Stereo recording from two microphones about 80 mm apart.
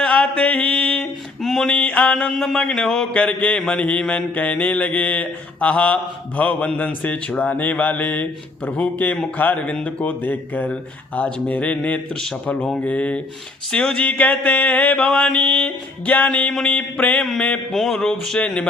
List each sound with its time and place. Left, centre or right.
0.0 s mantra: centre
17.7 s a sound: centre
18.3 s mantra: centre